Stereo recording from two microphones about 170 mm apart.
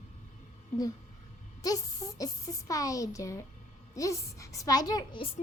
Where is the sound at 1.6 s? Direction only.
20° left (ahead or behind).